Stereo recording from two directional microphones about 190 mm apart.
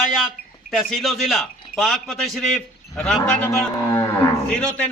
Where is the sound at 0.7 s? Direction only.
Centre (ahead or behind).